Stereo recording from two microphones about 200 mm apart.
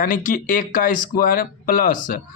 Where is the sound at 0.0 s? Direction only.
40° left (ahead or behind).